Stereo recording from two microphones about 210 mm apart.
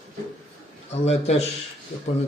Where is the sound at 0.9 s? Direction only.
30° left (ahead or behind).